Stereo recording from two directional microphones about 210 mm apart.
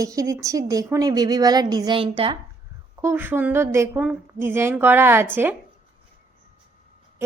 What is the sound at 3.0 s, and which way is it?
A woman's voice, 10° right (ahead or behind).